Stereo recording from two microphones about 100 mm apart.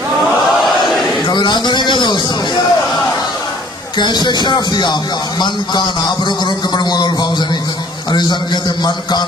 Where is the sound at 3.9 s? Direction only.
50° left (ahead or behind).